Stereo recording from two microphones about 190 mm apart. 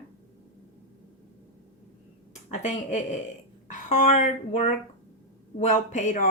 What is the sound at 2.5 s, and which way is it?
Speech, 40° left (ahead or behind).